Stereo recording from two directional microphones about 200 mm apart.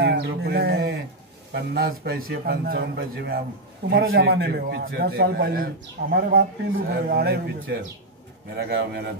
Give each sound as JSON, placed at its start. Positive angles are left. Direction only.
{"t": 0.0, "sound": "a man's voice", "side_deg": -55}